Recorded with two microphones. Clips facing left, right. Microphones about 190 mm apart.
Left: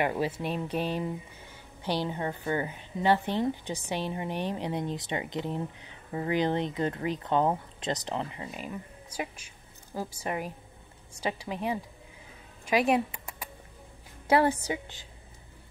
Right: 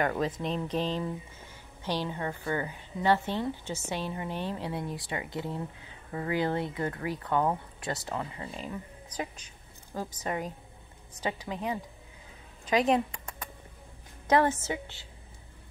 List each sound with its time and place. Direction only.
0.0 s a woman's voice: 10° left (ahead or behind)
8.5 s speech: 10° left (ahead or behind)
14.5 s speech: 15° left (ahead or behind)